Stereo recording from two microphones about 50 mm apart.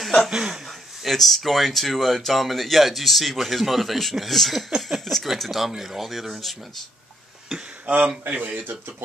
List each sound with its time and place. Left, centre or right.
0.0 s chuckle: centre
0.3 s speech: centre
1.0 s speech: centre
5.0 s speech: centre
8.3 s speech: right